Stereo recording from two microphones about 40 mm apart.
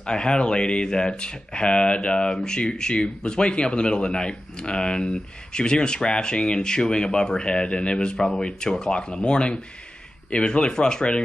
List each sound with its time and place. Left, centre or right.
0.0 s speech: left